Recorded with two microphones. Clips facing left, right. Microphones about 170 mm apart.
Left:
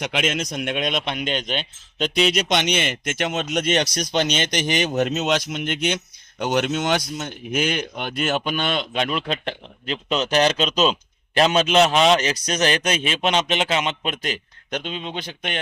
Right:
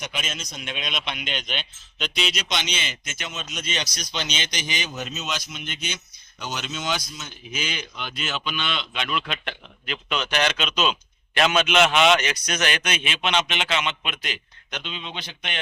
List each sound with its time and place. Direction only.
0.0 s a man's voice: 80° left; by 15.5 s 45° left (ahead or behind)